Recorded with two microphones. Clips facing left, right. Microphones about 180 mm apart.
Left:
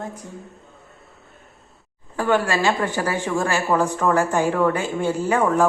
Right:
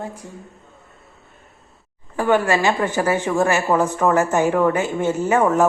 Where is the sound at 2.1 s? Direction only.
15° right (ahead or behind).